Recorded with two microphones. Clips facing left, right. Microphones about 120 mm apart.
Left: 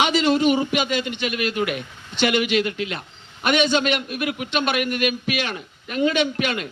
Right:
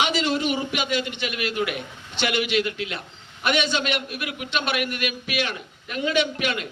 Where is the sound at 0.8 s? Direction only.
50° left (ahead or behind).